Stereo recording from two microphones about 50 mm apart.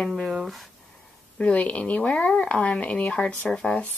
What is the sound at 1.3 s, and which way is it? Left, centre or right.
Speech, left.